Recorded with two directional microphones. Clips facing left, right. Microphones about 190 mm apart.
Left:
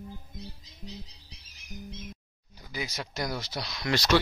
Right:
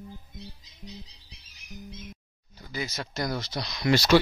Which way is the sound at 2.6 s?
10° left (ahead or behind).